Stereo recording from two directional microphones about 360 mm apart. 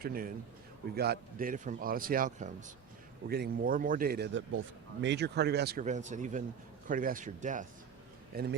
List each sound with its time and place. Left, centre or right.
0.0 s speech: right